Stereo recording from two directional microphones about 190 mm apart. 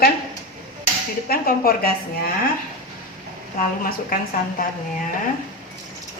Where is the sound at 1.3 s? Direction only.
50° left (ahead or behind).